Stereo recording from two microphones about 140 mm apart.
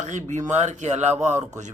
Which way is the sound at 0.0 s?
60° right (ahead or behind).